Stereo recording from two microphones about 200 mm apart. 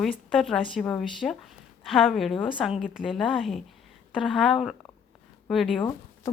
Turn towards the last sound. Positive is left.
turn(degrees=0)  # may be behind; listen again after turning